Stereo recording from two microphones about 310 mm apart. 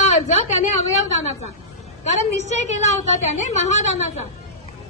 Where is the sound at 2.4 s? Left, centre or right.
Left.